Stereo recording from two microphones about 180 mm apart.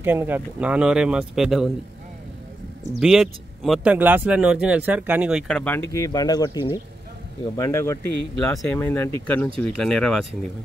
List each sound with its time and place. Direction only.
0.0 s speech: 10° right (ahead or behind)
3.0 s speech: centre (ahead or behind)
5.5 s speech: 10° left (ahead or behind)